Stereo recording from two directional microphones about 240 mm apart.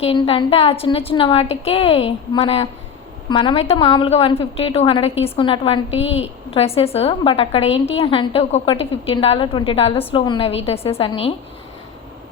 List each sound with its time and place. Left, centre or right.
0.0 s a woman's voice: left